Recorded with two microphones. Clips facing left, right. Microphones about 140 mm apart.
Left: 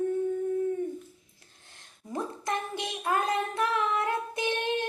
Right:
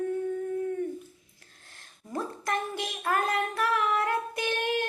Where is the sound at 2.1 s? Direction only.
20° left (ahead or behind).